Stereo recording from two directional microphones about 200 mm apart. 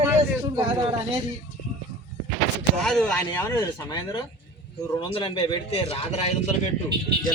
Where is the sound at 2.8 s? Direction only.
5° left (ahead or behind); by 6.5 s 30° left (ahead or behind).